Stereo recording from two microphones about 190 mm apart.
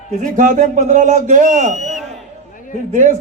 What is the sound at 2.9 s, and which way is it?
Speech, 40° right (ahead or behind).